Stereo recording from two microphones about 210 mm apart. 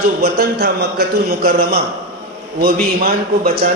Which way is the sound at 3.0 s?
45° right (ahead or behind).